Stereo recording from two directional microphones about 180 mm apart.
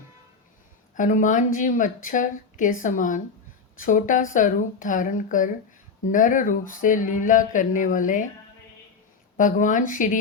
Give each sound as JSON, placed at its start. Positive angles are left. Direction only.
{"t": 0.9, "sound": "speech", "side_deg": 45}
{"t": 9.4, "sound": "speech", "side_deg": 45}